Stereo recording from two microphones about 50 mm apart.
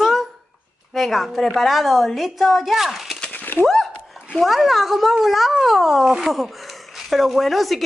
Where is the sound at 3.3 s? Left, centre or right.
Left.